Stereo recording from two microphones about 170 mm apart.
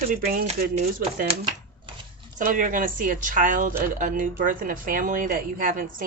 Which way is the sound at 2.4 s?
50° right (ahead or behind).